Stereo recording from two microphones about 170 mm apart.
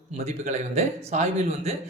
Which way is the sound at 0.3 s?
40° right (ahead or behind).